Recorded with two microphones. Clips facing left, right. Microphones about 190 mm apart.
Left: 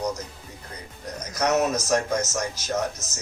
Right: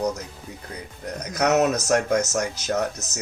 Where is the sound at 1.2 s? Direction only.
65° right (ahead or behind).